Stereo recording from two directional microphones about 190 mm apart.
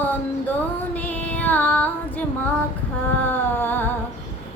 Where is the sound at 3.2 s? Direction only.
10° left (ahead or behind).